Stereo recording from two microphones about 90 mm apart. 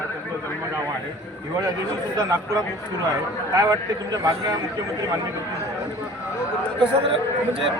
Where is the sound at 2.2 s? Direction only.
40° right (ahead or behind).